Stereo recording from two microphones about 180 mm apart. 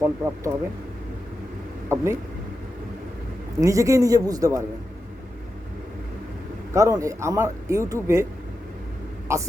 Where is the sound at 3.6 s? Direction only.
15° right (ahead or behind).